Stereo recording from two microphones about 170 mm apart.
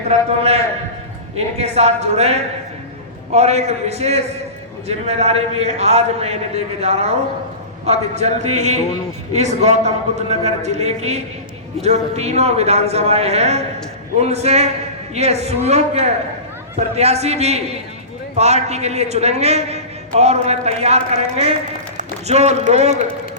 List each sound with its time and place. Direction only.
0.3 s a man's voice: 35° right (ahead or behind)